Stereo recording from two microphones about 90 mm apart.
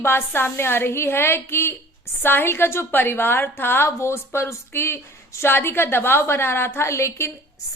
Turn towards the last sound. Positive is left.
turn(degrees=30)  # may be behind; listen again after turning